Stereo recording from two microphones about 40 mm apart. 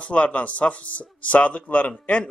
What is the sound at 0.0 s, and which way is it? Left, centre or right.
Speech, left.